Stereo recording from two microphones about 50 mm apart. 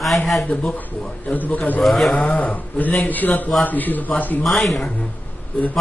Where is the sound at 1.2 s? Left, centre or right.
Left.